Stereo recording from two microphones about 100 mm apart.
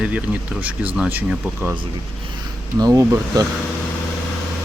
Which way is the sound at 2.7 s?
35° right (ahead or behind).